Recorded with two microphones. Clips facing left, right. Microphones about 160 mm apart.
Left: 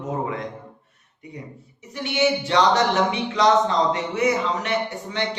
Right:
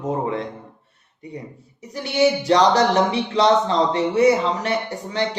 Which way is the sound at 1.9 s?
35° right (ahead or behind).